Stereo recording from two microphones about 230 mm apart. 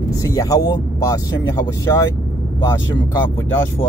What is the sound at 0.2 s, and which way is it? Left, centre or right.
Speech, centre.